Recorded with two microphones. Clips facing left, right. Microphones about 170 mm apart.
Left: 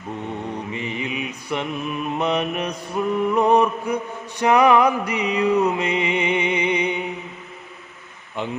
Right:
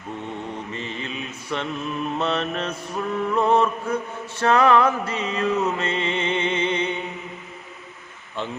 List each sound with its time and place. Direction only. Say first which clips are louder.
0.7 s mantra: left 4 dB; 15° left (ahead or behind)
8.4 s mantra: left 2 dB; 15° left (ahead or behind)